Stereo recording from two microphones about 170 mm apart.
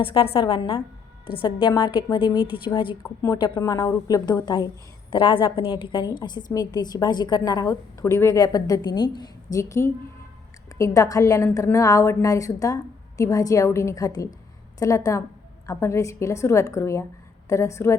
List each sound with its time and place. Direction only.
0.0 s a woman's voice: 30° left (ahead or behind)